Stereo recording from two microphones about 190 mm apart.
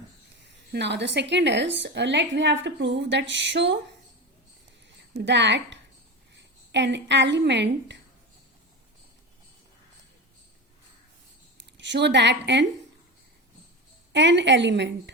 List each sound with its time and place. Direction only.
0.4 s a woman's voice: 65° right (ahead or behind)
5.1 s a woman's voice: 65° right (ahead or behind)
11.5 s speech: 65° right (ahead or behind)
14.1 s a woman's voice: 70° right (ahead or behind)